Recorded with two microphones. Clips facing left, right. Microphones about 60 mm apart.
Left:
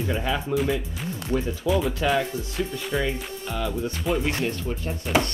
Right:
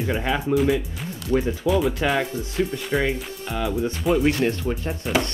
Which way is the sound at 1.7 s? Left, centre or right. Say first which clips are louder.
Right 1 dB; centre.